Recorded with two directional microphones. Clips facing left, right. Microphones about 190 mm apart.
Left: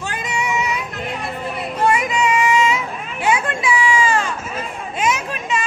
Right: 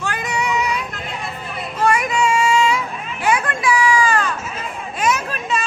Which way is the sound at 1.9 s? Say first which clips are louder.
Right 1 dB; 20° left (ahead or behind).